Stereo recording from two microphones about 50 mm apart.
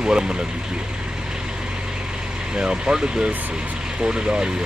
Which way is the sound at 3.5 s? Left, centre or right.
Right.